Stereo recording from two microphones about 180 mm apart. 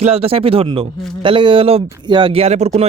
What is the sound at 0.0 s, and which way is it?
A man's voice, 35° right (ahead or behind).